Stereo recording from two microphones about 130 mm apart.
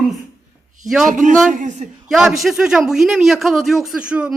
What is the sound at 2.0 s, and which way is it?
A man's voice, centre (ahead or behind).